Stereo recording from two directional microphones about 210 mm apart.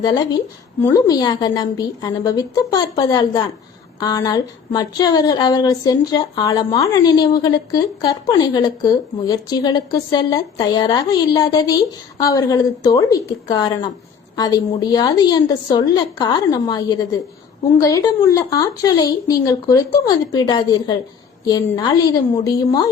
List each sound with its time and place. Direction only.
0.0 s speech: 20° left (ahead or behind)